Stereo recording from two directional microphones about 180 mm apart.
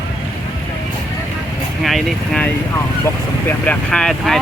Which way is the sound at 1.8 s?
Centre (ahead or behind).